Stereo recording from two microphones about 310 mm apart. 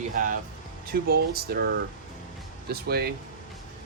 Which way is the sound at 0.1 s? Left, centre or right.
Right.